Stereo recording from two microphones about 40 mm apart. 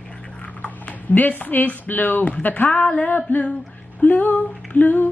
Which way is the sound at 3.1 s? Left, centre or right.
Left.